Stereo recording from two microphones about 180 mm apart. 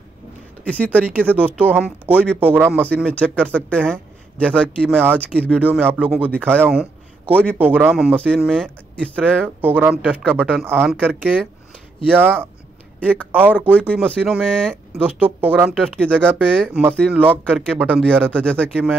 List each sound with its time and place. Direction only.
0.7 s a man's voice: 5° left (ahead or behind)
0.9 s speech: 10° right (ahead or behind)
2.9 s speech: 5° left (ahead or behind)
4.9 s speech: 10° right (ahead or behind)
9.2 s speech: 10° right (ahead or behind)
13.0 s a man's voice: 5° left (ahead or behind)
13.3 s speech: 10° right (ahead or behind)
15.0 s speech: 10° right (ahead or behind)
15.7 s speech: centre (ahead or behind)
16.1 s speech: 10° right (ahead or behind)
16.9 s speech: 5° left (ahead or behind)
17.7 s speech: 5° right (ahead or behind)
18.2 s speech: 5° left (ahead or behind)